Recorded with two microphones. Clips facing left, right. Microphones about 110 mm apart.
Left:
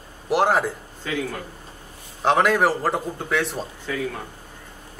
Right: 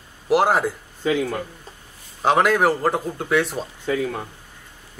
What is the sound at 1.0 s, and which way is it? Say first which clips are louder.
Speech: right 7 dB; 20° right (ahead or behind).